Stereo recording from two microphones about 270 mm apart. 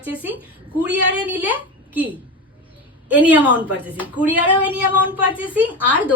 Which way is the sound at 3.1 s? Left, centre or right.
Centre.